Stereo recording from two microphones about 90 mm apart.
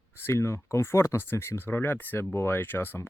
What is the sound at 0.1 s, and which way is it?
Speech, 25° left (ahead or behind).